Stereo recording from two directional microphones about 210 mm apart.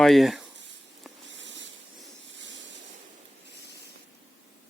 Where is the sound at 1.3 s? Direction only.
60° right (ahead or behind).